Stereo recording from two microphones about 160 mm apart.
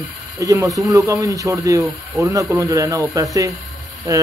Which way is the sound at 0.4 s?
20° right (ahead or behind).